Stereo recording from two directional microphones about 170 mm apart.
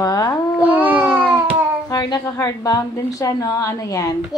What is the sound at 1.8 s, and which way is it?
A woman's voice, 20° left (ahead or behind).